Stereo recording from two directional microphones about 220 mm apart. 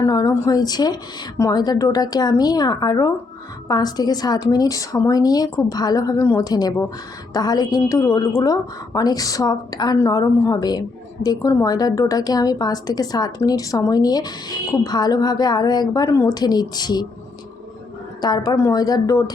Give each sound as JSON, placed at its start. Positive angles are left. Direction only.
{"t": 0.0, "sound": "a woman's voice", "side_deg": 15}
{"t": 18.2, "sound": "a woman's voice", "side_deg": 20}